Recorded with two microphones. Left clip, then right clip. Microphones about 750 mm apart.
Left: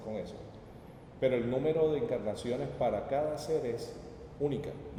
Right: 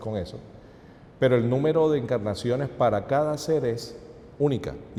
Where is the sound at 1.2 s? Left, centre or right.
Right.